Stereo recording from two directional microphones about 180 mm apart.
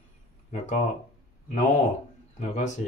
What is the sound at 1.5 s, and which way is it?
Speech, 40° left (ahead or behind).